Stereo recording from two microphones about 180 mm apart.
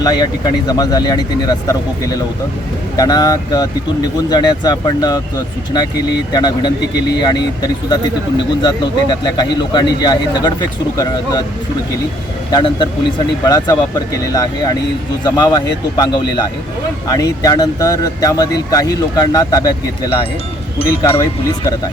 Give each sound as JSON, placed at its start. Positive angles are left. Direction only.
{"t": 0.0, "sound": "speech", "side_deg": 20}
{"t": 3.0, "sound": "speech", "side_deg": 20}
{"t": 6.3, "sound": "speech", "side_deg": 25}
{"t": 12.5, "sound": "speech", "side_deg": 25}
{"t": 21.2, "sound": "speech", "side_deg": 20}